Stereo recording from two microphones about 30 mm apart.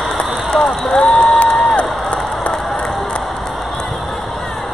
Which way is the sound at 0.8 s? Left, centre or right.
Centre.